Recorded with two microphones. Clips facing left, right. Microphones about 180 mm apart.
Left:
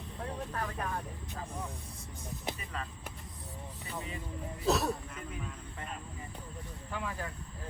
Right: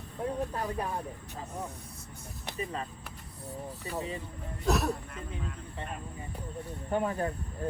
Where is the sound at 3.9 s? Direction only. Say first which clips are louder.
Right 6 dB; 35° right (ahead or behind).